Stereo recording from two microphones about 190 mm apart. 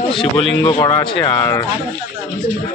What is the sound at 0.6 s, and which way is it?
Speech, 20° left (ahead or behind).